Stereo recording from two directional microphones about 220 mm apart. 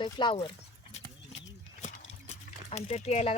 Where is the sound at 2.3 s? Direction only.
30° left (ahead or behind).